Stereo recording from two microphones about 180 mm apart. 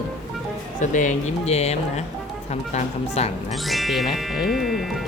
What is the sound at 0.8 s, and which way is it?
Speech, 45° left (ahead or behind).